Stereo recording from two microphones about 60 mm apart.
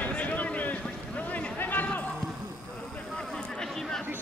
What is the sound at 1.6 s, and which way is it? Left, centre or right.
Basketball bounce, left.